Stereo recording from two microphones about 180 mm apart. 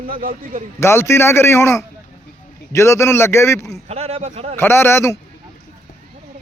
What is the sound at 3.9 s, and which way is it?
Speech, 35° right (ahead or behind).